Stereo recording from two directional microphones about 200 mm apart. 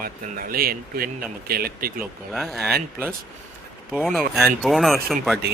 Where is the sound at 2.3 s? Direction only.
Centre (ahead or behind).